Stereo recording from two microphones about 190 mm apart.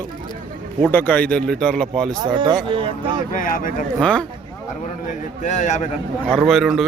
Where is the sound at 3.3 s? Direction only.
45° left (ahead or behind).